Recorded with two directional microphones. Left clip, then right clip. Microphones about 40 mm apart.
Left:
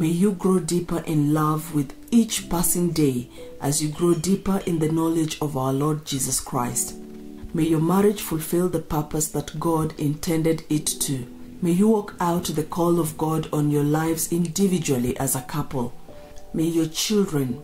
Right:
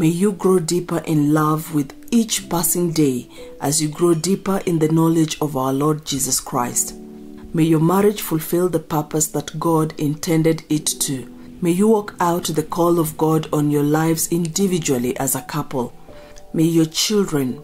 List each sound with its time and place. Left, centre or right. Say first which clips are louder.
0.0 s speech: right 5 dB; right
3.8 s speech: right 4 dB; right